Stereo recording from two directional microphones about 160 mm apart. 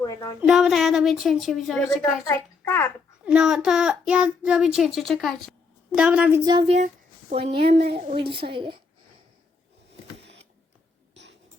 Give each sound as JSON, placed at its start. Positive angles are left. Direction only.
{"t": 0.0, "sound": "a sound", "side_deg": 20}
{"t": 0.3, "sound": "child singing", "side_deg": -5}
{"t": 2.0, "sound": "a child's voice", "side_deg": 15}
{"t": 3.2, "sound": "child singing", "side_deg": -5}
{"t": 6.4, "sound": "female singing", "side_deg": -30}
{"t": 6.7, "sound": "a sound", "side_deg": -50}
{"t": 7.4, "sound": "a woman's voice", "side_deg": -35}
{"t": 11.1, "sound": "writing", "side_deg": -90}